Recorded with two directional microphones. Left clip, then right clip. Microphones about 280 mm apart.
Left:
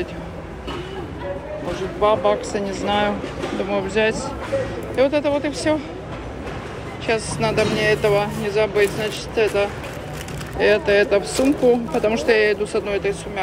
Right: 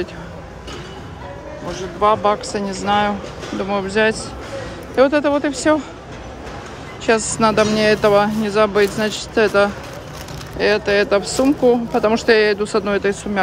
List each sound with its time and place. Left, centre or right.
2.0 s speech: centre
5.7 s speech: right
7.3 s speech: centre